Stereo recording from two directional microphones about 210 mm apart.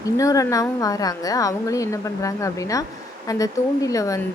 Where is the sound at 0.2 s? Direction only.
15° left (ahead or behind).